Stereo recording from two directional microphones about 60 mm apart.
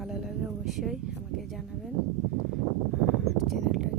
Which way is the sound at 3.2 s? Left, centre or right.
Centre.